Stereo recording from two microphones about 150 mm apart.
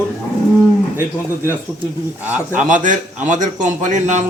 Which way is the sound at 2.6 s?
60° right (ahead or behind).